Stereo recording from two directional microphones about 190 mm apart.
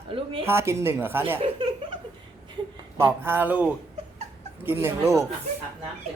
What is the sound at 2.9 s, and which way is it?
Speech, 10° right (ahead or behind).